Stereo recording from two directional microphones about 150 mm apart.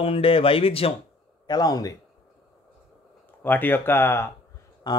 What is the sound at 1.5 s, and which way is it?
Speech, 25° left (ahead or behind).